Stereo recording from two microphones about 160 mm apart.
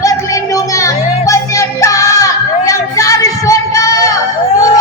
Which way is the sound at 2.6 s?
20° left (ahead or behind).